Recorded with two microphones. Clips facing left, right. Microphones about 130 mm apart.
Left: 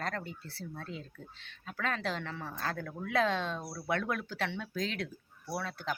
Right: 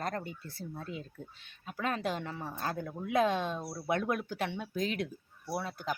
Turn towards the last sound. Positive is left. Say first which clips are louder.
# right 1 dB
turn(degrees=-10)  # may be behind; listen again after turning